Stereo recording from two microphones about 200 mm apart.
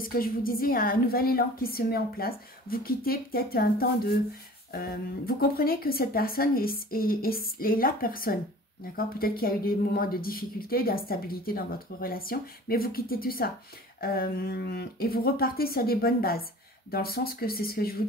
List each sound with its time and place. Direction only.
0.0 s speech: 45° left (ahead or behind)